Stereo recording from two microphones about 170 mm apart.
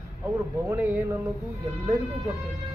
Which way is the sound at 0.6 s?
10° right (ahead or behind).